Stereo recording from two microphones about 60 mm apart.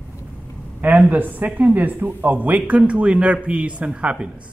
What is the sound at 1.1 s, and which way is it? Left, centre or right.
A man's voice, right.